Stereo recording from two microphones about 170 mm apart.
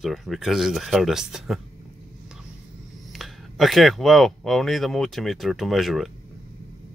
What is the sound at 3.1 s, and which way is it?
Speech, centre (ahead or behind).